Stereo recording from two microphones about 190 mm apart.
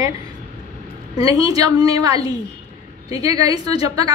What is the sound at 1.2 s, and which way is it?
A woman's voice, 20° right (ahead or behind).